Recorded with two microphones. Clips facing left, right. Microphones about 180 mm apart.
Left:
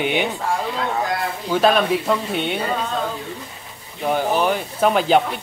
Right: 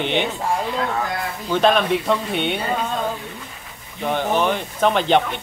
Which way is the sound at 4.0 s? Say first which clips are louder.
Left 1 dB; 5° left (ahead or behind).